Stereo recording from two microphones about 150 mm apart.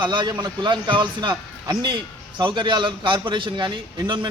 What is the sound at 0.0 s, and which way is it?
A man's voice, 30° right (ahead or behind).